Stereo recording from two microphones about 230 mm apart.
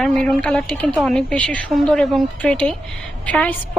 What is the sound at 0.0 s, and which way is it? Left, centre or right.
A woman's voice, centre.